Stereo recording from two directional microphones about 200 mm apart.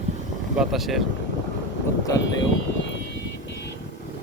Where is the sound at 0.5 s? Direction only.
5° right (ahead or behind).